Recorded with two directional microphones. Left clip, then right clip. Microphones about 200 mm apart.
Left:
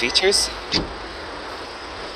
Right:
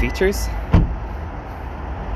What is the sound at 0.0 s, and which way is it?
Speech, 10° left (ahead or behind).